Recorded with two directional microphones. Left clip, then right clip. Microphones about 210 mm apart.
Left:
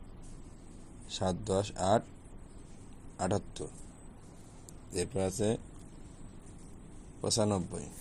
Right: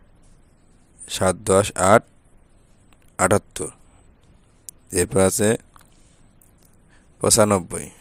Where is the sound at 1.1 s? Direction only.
50° right (ahead or behind).